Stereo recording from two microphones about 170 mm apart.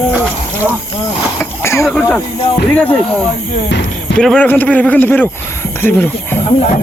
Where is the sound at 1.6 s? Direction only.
15° left (ahead or behind).